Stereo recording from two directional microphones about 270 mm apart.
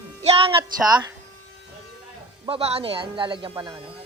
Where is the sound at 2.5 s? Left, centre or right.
Right.